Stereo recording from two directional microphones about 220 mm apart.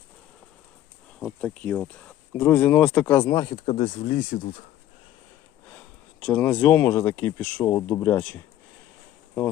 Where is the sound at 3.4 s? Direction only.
30° left (ahead or behind).